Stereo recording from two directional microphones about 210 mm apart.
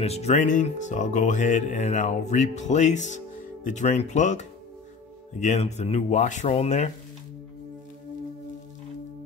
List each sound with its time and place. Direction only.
0.0 s speech: 30° left (ahead or behind)